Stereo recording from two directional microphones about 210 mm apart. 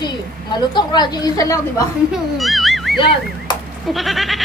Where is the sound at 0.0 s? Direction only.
20° left (ahead or behind).